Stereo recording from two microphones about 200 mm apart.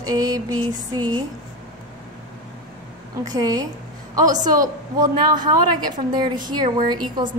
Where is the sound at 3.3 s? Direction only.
20° right (ahead or behind).